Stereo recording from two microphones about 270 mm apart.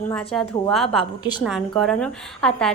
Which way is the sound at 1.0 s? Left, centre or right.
Centre.